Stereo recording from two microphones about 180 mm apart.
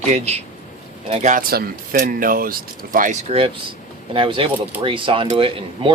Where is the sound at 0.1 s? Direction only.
35° right (ahead or behind).